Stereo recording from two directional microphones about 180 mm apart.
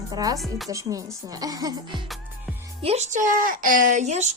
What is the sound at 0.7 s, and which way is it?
Speech, 20° right (ahead or behind).